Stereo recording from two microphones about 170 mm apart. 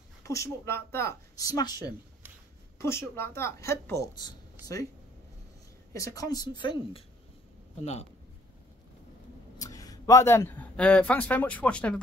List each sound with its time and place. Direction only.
0.2 s speech: 20° left (ahead or behind)
2.8 s speech: 15° left (ahead or behind)
5.9 s speech: 20° left (ahead or behind)
7.8 s a man's voice: 40° left (ahead or behind)
9.6 s speech: 20° left (ahead or behind)